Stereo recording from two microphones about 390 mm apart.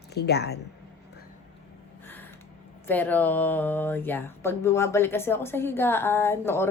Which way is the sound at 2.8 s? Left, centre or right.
Centre.